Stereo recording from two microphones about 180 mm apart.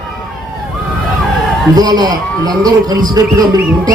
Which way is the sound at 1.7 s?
20° right (ahead or behind).